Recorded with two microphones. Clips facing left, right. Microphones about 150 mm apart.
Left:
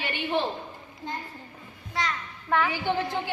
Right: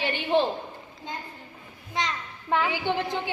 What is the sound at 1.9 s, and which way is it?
Speech, 20° right (ahead or behind).